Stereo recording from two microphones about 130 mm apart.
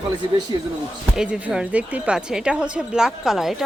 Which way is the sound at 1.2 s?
5° right (ahead or behind).